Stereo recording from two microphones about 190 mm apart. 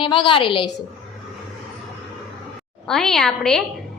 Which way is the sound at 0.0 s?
25° left (ahead or behind).